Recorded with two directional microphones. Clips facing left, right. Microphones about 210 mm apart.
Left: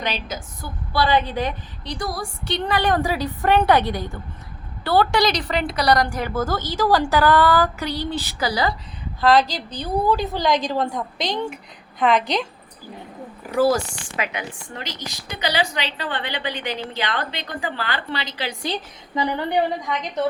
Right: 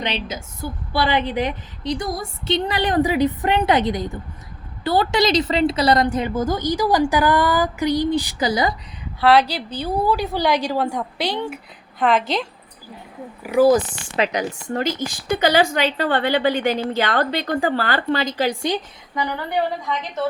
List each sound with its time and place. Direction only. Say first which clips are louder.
0.0 s a woman's voice: right 2 dB; 25° right (ahead or behind); by 12.5 s centre (ahead or behind)
13.4 s a woman's voice: right 4 dB; 15° right (ahead or behind)
14.2 s a woman's voice: right 7 dB; 40° right (ahead or behind)
19.1 s a woman's voice: left 2 dB; 20° left (ahead or behind)